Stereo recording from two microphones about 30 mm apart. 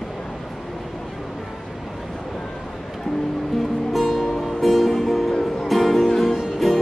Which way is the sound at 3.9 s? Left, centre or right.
Centre.